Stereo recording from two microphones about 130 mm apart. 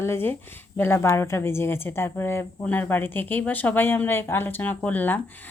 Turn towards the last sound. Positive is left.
turn(degrees=15)  # may be behind; listen again after turning